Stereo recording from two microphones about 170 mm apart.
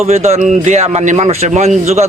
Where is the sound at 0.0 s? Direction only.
40° right (ahead or behind).